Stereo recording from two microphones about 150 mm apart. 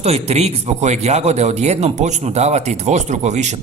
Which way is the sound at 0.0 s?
45° right (ahead or behind).